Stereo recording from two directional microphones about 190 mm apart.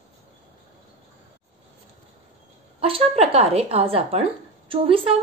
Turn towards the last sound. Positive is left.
turn(degrees=-30)  # may be behind; listen again after turning